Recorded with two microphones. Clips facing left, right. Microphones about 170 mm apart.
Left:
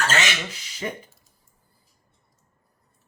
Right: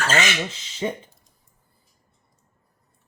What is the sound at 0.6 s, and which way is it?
Speech, 25° right (ahead or behind).